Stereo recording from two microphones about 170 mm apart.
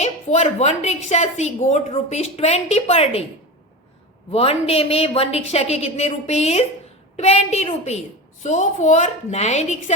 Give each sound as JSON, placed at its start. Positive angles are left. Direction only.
{"t": 0.0, "sound": "a woman's voice", "side_deg": 40}
{"t": 4.3, "sound": "a woman's voice", "side_deg": 35}